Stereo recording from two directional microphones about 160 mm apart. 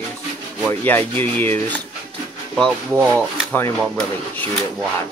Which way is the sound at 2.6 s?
5° left (ahead or behind).